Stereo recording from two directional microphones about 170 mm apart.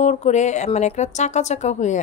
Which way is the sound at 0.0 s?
40° left (ahead or behind).